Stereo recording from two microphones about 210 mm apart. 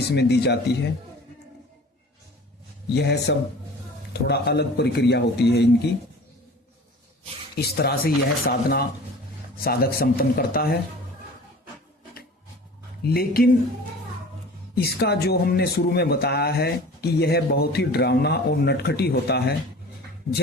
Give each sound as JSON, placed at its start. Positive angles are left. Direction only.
{"t": 0.1, "sound": "speech", "side_deg": 50}
{"t": 2.9, "sound": "speech", "side_deg": 50}
{"t": 7.5, "sound": "speech", "side_deg": 50}
{"t": 13.0, "sound": "speech", "side_deg": 45}
{"t": 14.8, "sound": "speech", "side_deg": 50}